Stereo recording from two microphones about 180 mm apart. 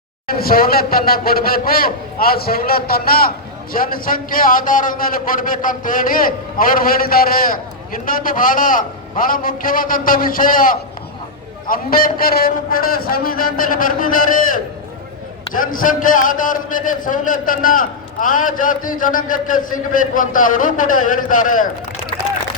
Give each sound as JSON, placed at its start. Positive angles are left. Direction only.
{"t": 0.3, "sound": "a man's voice", "side_deg": 55}
{"t": 15.5, "sound": "a man's voice", "side_deg": 50}